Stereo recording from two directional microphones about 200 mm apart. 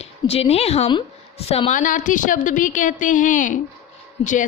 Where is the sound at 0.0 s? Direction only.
30° left (ahead or behind).